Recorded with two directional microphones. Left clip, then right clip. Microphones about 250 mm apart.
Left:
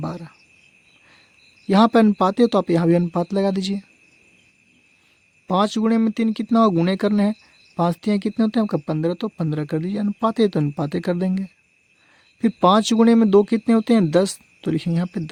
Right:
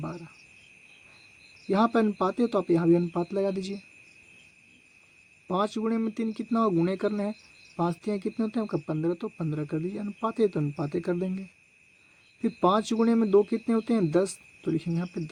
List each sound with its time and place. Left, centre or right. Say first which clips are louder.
0.0 s cricket: left 7 dB; left
1.7 s speech: left 8 dB; left
5.5 s speech: left 8 dB; left